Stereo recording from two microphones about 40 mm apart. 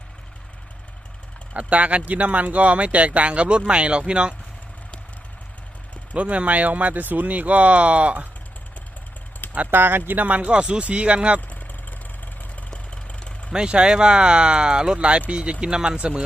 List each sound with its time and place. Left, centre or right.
1.5 s speech: right
6.1 s speech: right
9.6 s speech: right
10.2 s speech: right
11.3 s vehicle: left
12.7 s engine: left
13.5 s speech: right